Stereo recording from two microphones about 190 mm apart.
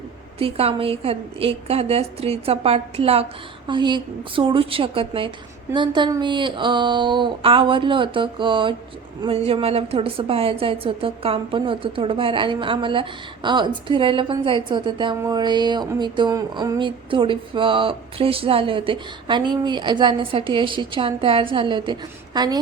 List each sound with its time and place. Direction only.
0.3 s a woman's voice: 30° right (ahead or behind)